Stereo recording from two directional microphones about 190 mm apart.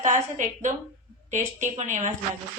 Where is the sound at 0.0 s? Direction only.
40° right (ahead or behind).